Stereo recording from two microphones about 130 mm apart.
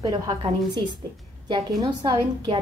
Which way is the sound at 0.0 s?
30° right (ahead or behind).